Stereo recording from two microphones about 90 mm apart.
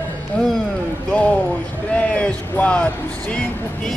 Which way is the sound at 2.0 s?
15° left (ahead or behind).